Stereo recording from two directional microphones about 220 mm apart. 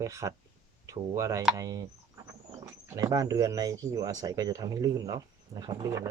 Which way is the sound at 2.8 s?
15° right (ahead or behind).